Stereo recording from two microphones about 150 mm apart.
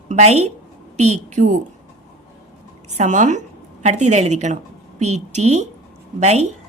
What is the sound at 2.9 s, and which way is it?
A woman's voice, 50° right (ahead or behind).